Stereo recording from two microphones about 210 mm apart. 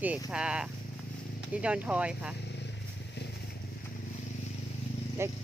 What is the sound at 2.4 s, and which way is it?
Vehicle, 55° left (ahead or behind).